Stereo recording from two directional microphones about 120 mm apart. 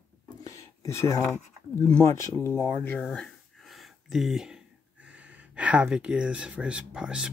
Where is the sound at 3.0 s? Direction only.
5° left (ahead or behind).